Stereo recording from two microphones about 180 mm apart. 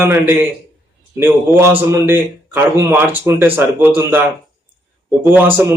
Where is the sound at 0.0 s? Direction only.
10° right (ahead or behind).